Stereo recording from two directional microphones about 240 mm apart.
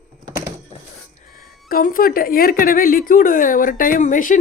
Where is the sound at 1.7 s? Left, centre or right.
Left.